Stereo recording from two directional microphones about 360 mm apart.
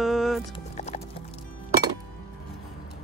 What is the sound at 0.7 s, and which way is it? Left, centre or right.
Music, centre.